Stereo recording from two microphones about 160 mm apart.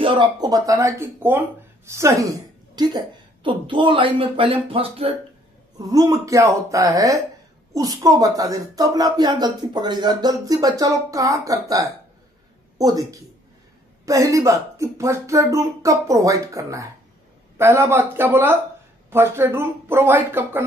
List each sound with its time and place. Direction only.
0.0 s a woman's voice: 30° right (ahead or behind)
5.8 s speech: 20° right (ahead or behind)